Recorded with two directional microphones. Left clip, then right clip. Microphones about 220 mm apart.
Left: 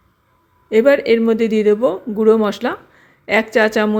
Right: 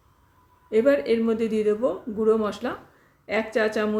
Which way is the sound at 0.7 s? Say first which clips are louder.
Left 8 dB; 35° left (ahead or behind).